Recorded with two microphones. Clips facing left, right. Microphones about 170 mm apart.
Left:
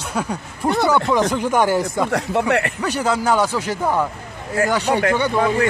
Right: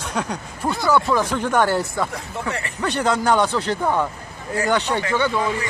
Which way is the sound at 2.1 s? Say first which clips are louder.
Left 9 dB; 70° left (ahead or behind).